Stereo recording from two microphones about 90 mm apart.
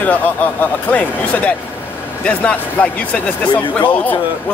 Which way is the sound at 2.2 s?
15° left (ahead or behind).